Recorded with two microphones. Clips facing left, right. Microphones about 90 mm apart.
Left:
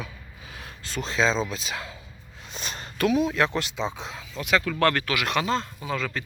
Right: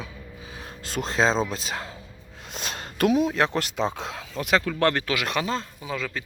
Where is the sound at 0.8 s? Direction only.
45° right (ahead or behind).